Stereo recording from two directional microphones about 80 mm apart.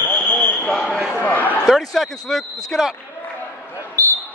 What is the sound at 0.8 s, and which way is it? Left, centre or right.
Basketball bounce, centre.